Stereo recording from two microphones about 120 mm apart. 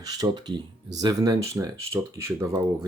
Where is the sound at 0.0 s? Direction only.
30° right (ahead or behind).